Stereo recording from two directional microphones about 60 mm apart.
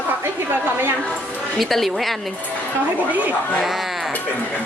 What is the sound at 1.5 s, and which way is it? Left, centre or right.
Speech, centre.